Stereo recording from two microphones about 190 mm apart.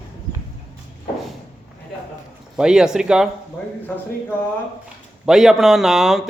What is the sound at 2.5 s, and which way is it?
Speech, 5° right (ahead or behind).